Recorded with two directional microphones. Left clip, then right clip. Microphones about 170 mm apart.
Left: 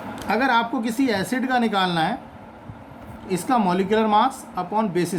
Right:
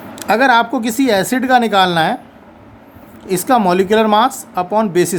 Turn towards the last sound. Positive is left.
turn(degrees=-45)  # may be behind; listen again after turning